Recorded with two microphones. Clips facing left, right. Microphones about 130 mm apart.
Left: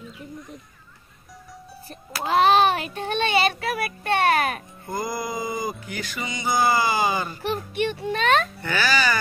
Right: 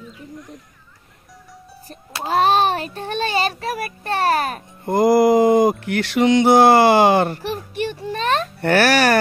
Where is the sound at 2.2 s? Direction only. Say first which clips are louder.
Right 1 dB; 40° right (ahead or behind).